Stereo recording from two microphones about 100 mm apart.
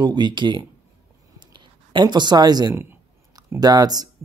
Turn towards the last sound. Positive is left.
turn(degrees=-40)  # may be behind; listen again after turning